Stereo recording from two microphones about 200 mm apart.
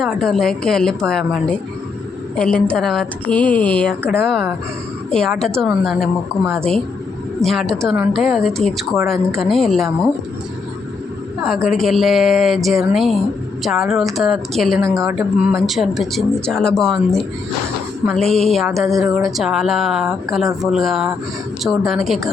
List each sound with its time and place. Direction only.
0.0 s speech: centre (ahead or behind)
11.4 s speech: centre (ahead or behind)
18.9 s a woman's voice: 15° right (ahead or behind)
19.2 s speech: centre (ahead or behind)